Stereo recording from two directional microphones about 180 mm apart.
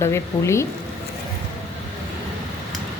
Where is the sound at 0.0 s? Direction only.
15° left (ahead or behind).